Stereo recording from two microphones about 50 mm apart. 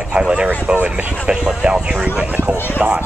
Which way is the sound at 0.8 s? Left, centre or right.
Right.